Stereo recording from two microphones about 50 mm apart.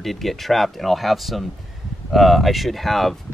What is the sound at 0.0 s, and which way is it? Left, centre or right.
Speech, centre.